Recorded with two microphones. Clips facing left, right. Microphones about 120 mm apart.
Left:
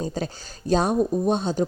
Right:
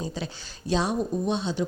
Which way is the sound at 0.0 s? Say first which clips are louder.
Left 5 dB; 45° left (ahead or behind).